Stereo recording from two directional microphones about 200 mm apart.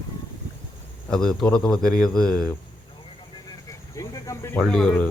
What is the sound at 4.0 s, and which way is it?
Speech, 15° left (ahead or behind).